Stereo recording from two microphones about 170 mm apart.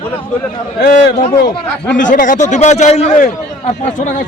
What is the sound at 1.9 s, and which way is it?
A man's voice, 50° left (ahead or behind).